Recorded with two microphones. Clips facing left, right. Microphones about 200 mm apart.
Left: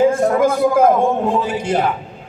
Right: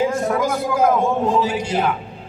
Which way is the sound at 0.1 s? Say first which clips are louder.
Left 5 dB; 55° left (ahead or behind).